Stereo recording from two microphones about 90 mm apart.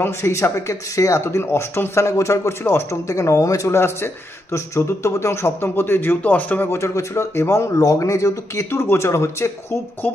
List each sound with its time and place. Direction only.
0.0 s speech: 30° left (ahead or behind)